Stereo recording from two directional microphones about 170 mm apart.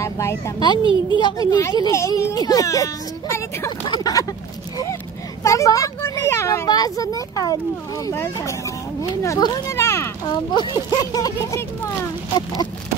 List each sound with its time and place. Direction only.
0.0 s speech: 15° left (ahead or behind)
5.4 s speech: 20° left (ahead or behind)